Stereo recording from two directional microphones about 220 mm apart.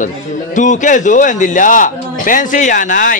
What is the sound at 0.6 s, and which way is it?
A man's voice, 35° left (ahead or behind).